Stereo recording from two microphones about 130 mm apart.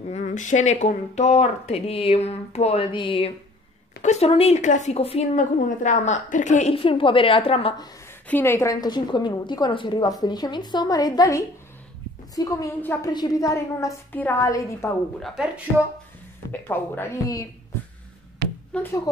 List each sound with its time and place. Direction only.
0.1 s speech: 70° left (ahead or behind); by 2.9 s 55° left (ahead or behind)
2.9 s a woman's voice: 40° left (ahead or behind)
4.0 s a woman's voice: 55° left (ahead or behind)
4.6 s speech: 65° left (ahead or behind); by 5.3 s 50° left (ahead or behind)
5.3 s a woman's voice: 70° left (ahead or behind)
6.7 s a woman's voice: 45° left (ahead or behind)
8.3 s speech: 15° left (ahead or behind)
8.8 s a woman's voice: 35° left (ahead or behind)
15.1 s speech: centre (ahead or behind)
16.6 s speech: 15° left (ahead or behind)
18.7 s speech: 15° left (ahead or behind)